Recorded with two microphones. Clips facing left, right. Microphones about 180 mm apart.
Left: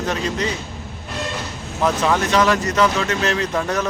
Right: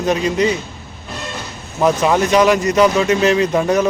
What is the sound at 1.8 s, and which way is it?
Speech, 15° right (ahead or behind).